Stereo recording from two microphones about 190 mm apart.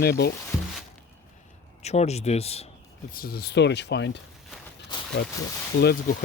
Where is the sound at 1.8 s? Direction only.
35° left (ahead or behind).